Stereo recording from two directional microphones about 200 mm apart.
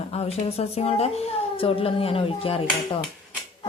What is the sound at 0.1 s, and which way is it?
A woman's voice, 30° left (ahead or behind).